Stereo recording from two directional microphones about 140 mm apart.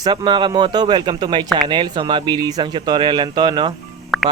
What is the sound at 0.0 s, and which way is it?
Speech, 35° right (ahead or behind).